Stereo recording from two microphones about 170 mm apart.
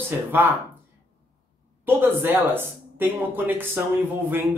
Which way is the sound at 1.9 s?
10° right (ahead or behind).